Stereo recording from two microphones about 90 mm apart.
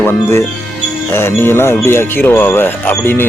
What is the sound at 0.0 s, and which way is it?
Speech, 30° left (ahead or behind).